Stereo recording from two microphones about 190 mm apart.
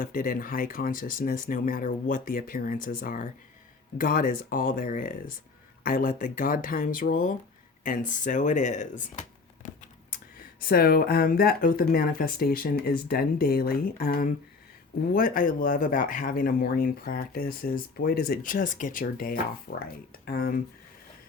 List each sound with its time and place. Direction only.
0.0 s speech: 45° left (ahead or behind)